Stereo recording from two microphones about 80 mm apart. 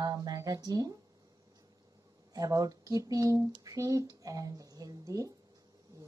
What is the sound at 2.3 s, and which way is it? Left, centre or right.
Speech, right.